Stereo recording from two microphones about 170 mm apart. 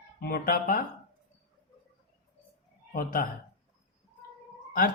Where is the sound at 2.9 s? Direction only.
55° left (ahead or behind).